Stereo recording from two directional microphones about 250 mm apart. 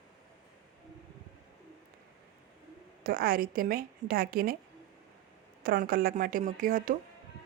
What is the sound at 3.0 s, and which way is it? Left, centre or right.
A woman's voice, right.